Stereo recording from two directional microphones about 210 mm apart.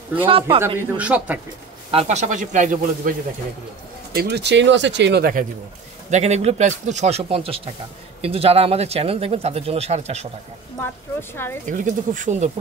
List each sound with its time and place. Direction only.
0.2 s speech: 25° right (ahead or behind)
0.9 s a man's voice: 5° right (ahead or behind)
1.9 s speech: 30° right (ahead or behind)
4.1 s speech: 50° right (ahead or behind)
6.0 s speech: 35° right (ahead or behind)
10.8 s a woman's voice: 10° left (ahead or behind)
11.6 s speech: 35° right (ahead or behind)